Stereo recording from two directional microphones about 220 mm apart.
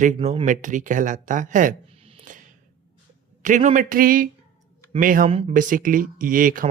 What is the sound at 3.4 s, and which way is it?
Speech, 35° right (ahead or behind).